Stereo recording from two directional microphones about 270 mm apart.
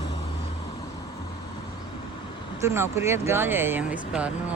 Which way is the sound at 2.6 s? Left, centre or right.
Centre.